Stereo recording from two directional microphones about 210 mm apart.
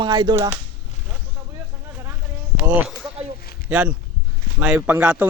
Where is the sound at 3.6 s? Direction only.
10° right (ahead or behind).